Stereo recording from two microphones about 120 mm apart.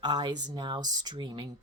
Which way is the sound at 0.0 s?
35° right (ahead or behind).